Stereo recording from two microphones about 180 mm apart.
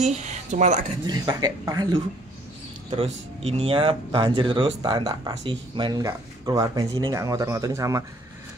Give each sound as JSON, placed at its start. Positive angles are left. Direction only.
{"t": 0.0, "sound": "speech", "side_deg": -40}
{"t": 1.0, "sound": "speech", "side_deg": -20}
{"t": 2.9, "sound": "speech", "side_deg": -35}